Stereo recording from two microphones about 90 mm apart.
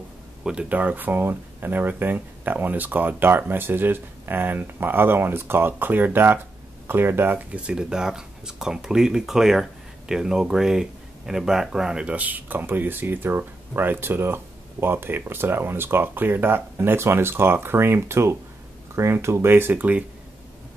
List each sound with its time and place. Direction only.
0.4 s speech: 10° right (ahead or behind)